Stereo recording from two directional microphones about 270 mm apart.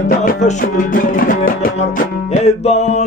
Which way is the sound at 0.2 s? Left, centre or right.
Left.